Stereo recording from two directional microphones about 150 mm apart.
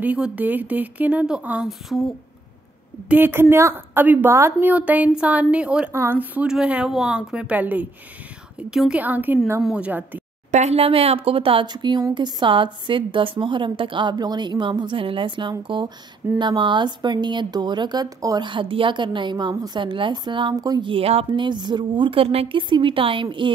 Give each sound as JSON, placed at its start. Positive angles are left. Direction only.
{"t": 0.0, "sound": "a woman's voice", "side_deg": -10}
{"t": 3.1, "sound": "a woman's voice", "side_deg": -15}
{"t": 10.5, "sound": "speech", "side_deg": -50}